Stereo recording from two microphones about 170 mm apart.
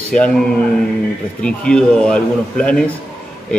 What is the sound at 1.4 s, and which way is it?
Speech, 5° left (ahead or behind).